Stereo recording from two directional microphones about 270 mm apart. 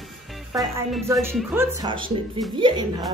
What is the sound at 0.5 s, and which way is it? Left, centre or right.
Speech, centre.